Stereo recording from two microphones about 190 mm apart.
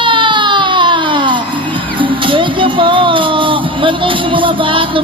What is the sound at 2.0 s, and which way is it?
Music, 25° right (ahead or behind).